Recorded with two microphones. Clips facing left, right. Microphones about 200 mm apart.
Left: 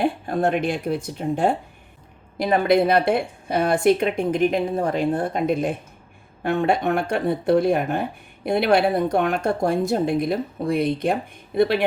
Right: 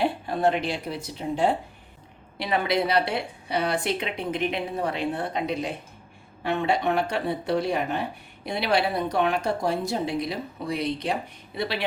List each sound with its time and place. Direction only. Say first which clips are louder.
0.0 s speech: left 2 dB; 50° left (ahead or behind)